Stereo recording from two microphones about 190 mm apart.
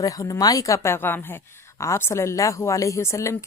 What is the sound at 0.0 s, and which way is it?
A woman's voice, 20° left (ahead or behind).